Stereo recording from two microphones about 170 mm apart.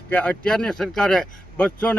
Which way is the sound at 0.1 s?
10° left (ahead or behind).